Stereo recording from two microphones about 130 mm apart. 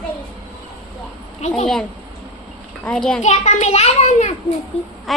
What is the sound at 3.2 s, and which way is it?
A child's voice, 60° left (ahead or behind).